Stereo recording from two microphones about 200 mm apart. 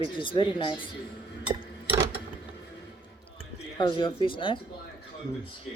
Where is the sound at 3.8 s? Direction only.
25° left (ahead or behind).